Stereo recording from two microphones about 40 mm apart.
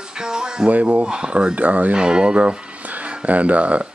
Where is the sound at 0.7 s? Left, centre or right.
Right.